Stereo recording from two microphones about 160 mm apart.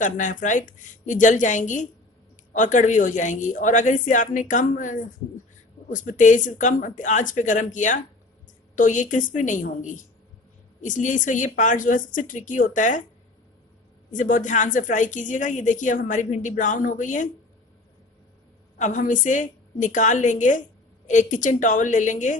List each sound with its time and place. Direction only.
0.0 s a woman's voice: 50° left (ahead or behind)
14.1 s a woman's voice: 55° left (ahead or behind)
18.8 s a woman's voice: 50° left (ahead or behind)